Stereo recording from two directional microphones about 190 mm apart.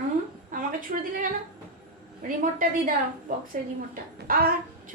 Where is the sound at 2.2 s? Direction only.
45° right (ahead or behind).